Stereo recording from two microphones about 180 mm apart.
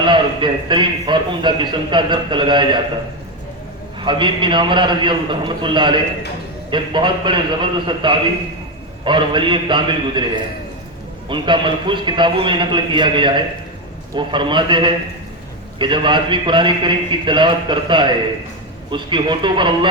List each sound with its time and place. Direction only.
0.0 s a man's voice: 25° right (ahead or behind)
4.0 s a man's voice: 25° right (ahead or behind)
11.3 s a man's voice: 25° right (ahead or behind)